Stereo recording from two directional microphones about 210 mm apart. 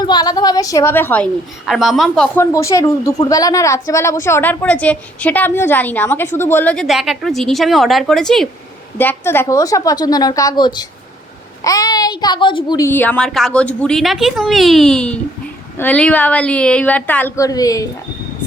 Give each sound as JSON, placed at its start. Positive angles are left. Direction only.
{"t": 0.0, "sound": "a woman's voice", "side_deg": 20}